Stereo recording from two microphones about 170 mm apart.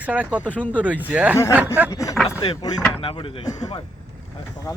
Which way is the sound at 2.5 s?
25° left (ahead or behind).